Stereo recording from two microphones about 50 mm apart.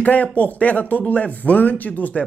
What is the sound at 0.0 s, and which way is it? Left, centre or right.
Speech, left.